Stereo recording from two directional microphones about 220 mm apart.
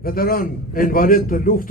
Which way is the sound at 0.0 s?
40° left (ahead or behind).